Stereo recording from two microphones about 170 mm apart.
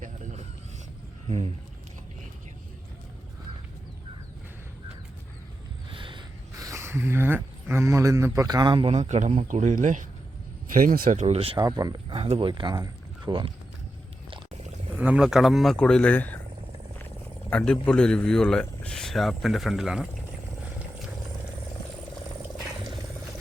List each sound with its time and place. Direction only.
5.9 s a sound: 30° right (ahead or behind)
9.0 s speech: 45° right (ahead or behind)
11.5 s speech: 20° right (ahead or behind)
14.9 s a man's voice: 5° right (ahead or behind); by 16.4 s 10° left (ahead or behind)
17.5 s a man's voice: 5° left (ahead or behind)